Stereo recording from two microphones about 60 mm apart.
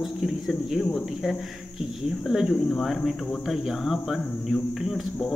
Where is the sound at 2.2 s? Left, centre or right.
Centre.